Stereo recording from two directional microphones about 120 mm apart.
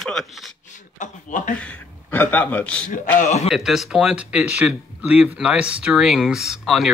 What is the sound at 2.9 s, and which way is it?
Speech, 75° left (ahead or behind).